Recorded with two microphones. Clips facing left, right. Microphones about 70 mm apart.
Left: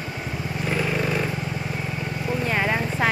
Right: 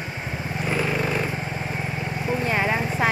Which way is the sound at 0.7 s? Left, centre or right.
Centre.